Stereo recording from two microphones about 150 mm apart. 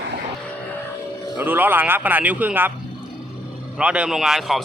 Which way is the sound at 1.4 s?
10° right (ahead or behind).